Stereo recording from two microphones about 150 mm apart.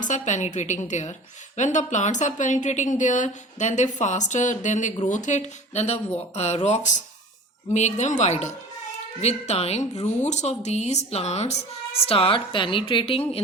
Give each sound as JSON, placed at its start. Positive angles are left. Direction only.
{"t": 0.0, "sound": "a woman's voice", "side_deg": 55}